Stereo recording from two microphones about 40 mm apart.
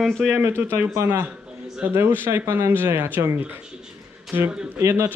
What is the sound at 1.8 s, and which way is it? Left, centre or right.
Speech, right.